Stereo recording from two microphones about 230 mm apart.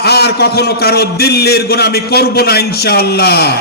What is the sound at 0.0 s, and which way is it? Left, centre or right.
A man's voice, left.